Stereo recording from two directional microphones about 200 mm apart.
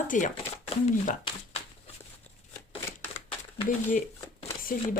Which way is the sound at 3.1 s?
35° left (ahead or behind).